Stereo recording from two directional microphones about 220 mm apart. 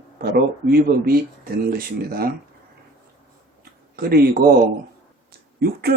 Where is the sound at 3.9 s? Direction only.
40° right (ahead or behind).